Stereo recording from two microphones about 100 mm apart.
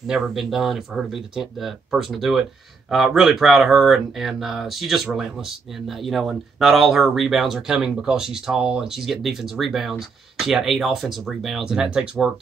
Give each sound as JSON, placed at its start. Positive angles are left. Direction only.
{"t": 0.0, "sound": "speech", "side_deg": -5}